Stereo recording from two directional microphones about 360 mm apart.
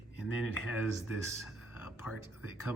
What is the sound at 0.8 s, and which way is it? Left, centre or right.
Speech, centre.